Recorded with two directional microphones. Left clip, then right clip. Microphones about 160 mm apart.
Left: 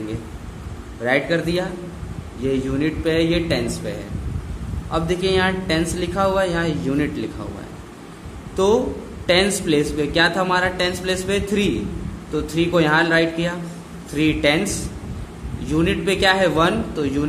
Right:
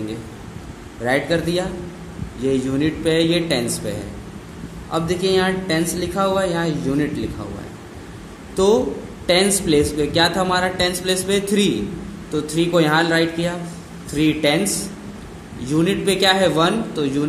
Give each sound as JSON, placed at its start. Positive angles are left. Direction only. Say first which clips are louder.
{"t": 1.0, "sound": "a man's voice", "louder": "even", "side_deg": -15}
{"t": 4.9, "sound": "a man's voice", "louder": "right 1 dB", "side_deg": -15}
{"t": 8.5, "sound": "a man's voice", "louder": "right 1 dB", "side_deg": -15}